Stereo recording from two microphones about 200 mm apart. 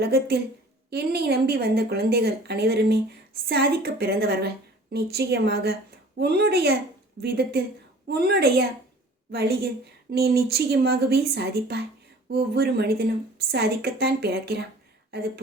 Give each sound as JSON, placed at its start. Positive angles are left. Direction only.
{"t": 0.0, "sound": "a woman's voice", "side_deg": -55}